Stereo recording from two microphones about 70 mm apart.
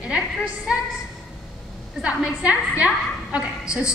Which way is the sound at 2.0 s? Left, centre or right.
Centre.